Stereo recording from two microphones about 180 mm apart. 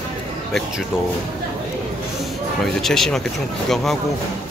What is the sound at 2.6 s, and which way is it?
Speech, centre (ahead or behind).